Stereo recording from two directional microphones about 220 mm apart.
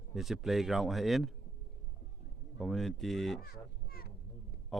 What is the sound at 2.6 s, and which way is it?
Speech, centre (ahead or behind).